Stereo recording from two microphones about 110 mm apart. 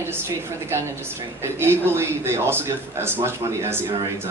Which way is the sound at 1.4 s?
20° right (ahead or behind).